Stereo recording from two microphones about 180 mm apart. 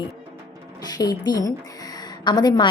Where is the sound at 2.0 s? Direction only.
25° left (ahead or behind).